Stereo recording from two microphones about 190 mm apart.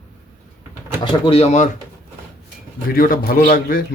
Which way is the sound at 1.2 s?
30° left (ahead or behind).